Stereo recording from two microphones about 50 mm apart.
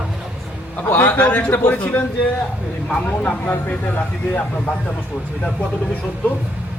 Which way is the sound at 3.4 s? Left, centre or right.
Left.